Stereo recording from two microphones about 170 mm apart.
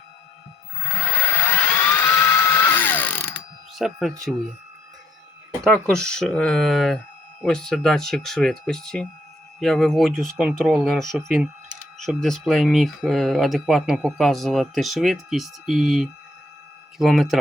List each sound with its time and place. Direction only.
0.9 s a sound: 15° left (ahead or behind)
3.8 s speech: centre (ahead or behind)
5.6 s speech: 5° left (ahead or behind)